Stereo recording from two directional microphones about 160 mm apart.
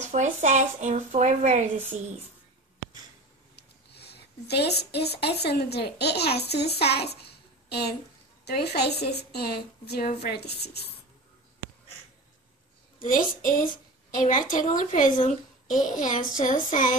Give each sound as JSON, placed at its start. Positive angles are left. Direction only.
{"t": 0.0, "sound": "speech", "side_deg": -50}
{"t": 3.5, "sound": "a woman's voice", "side_deg": 90}
{"t": 13.1, "sound": "a woman's voice", "side_deg": 55}